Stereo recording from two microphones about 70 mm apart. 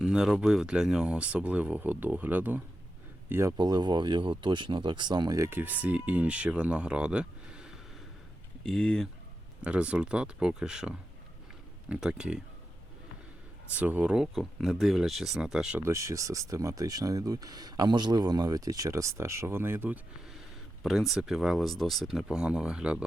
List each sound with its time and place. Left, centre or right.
0.0 s speech: centre
3.6 s speech: right
5.5 s speech: right; by 7.8 s centre
8.6 s speech: centre
9.6 s speech: centre
13.7 s speech: right
14.3 s speech: centre
15.8 s speech: right
20.8 s speech: centre